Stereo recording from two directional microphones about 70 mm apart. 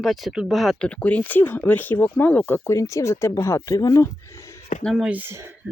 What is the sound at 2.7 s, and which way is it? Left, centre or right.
Speech, left.